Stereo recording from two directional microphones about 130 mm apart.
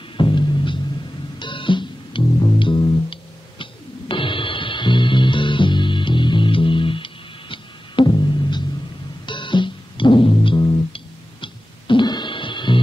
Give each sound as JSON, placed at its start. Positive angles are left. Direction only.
{"t": 0.2, "sound": "music", "side_deg": 40}